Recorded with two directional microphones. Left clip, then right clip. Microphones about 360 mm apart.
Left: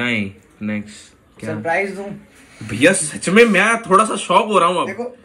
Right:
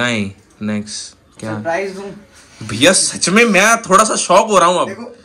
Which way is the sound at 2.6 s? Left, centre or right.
Centre.